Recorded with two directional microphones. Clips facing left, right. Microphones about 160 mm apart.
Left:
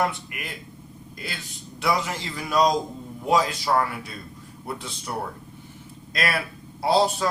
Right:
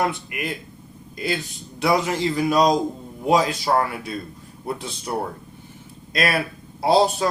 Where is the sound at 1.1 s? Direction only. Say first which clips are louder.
Right 11 dB; 20° right (ahead or behind).